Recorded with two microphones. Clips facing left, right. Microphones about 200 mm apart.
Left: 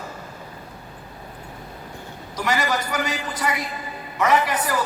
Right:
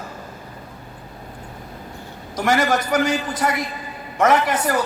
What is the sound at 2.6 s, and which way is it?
A man's voice, 50° right (ahead or behind).